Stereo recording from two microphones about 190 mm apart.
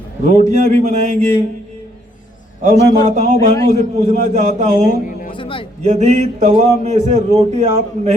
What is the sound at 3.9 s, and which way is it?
Speech, 40° right (ahead or behind).